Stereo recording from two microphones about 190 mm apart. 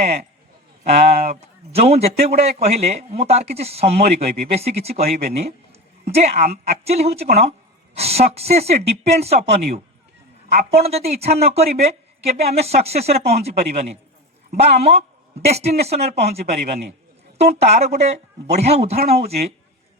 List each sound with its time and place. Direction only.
0.9 s a man's voice: 35° right (ahead or behind)
4.0 s speech: 50° right (ahead or behind)
4.5 s a man's voice: 35° right (ahead or behind)
10.5 s a man's voice: 35° right (ahead or behind)
14.5 s a man's voice: 35° right (ahead or behind)